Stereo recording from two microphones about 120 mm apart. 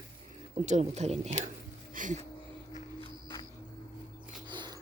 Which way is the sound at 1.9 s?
90° right.